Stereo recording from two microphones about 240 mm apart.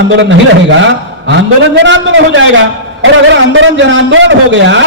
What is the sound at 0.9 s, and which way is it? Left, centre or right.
A man's voice, right.